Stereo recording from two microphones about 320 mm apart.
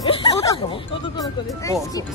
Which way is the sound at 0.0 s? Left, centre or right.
Centre.